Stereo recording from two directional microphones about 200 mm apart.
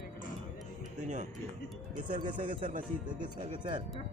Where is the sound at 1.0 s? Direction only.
35° right (ahead or behind).